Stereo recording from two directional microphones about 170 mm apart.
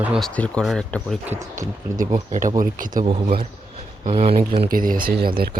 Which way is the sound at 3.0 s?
30° right (ahead or behind).